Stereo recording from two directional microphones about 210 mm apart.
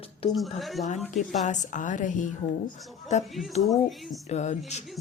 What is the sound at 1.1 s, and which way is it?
A woman's voice, 35° left (ahead or behind).